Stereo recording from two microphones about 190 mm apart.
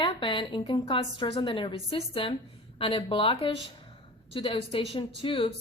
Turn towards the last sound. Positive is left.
turn(degrees=25)  # may be behind; listen again after turning